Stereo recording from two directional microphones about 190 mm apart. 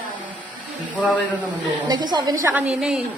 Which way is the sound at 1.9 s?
25° right (ahead or behind).